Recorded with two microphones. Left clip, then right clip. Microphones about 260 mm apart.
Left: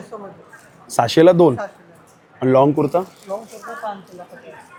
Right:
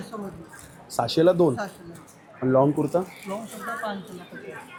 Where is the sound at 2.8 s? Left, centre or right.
Centre.